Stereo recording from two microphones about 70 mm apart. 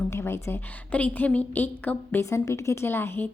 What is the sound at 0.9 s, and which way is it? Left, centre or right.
A woman's voice, left.